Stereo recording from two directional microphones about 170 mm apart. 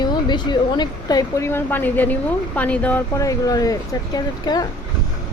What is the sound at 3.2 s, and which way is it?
A woman's voice, 20° left (ahead or behind).